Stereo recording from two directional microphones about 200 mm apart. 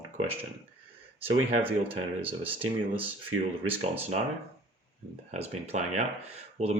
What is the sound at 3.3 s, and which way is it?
Speech, 90° right.